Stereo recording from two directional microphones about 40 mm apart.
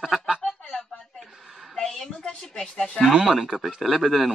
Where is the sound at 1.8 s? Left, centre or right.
Centre.